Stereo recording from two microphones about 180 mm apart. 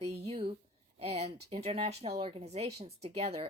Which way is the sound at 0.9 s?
35° right (ahead or behind).